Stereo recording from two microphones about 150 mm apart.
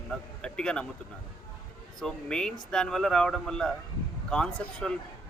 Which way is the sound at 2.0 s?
5° left (ahead or behind).